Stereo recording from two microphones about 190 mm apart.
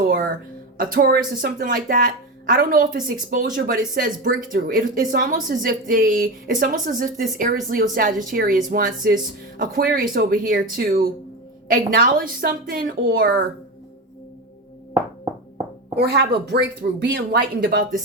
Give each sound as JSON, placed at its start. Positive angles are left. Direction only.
{"t": 0.8, "sound": "speech", "side_deg": -50}
{"t": 16.0, "sound": "speech", "side_deg": -60}